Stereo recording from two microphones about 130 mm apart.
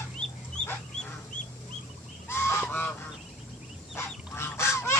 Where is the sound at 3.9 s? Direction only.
20° left (ahead or behind).